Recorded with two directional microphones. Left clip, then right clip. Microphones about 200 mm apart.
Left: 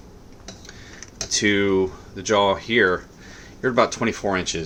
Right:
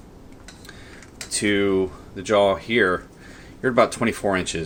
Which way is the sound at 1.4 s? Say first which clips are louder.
Left 1 dB; 5° left (ahead or behind).